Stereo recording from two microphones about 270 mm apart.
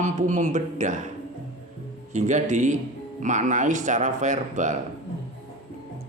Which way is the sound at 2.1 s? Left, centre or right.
Right.